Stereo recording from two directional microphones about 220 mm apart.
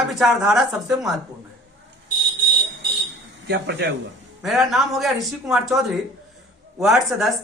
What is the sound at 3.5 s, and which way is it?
Speech, 50° right (ahead or behind).